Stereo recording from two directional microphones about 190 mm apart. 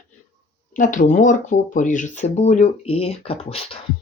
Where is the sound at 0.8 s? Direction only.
40° left (ahead or behind).